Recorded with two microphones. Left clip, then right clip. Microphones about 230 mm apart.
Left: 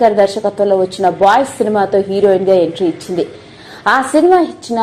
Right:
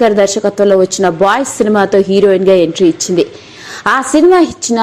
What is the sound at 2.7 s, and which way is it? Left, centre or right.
Speech, right.